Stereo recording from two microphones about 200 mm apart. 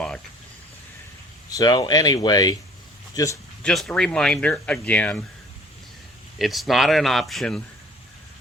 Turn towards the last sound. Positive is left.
turn(degrees=0)  # may be behind; listen again after turning